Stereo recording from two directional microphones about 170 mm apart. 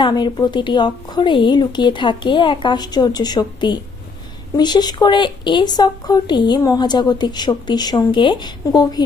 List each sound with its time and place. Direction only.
0.0 s speech: 25° left (ahead or behind)